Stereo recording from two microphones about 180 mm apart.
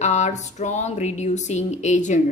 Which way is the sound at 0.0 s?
40° left (ahead or behind).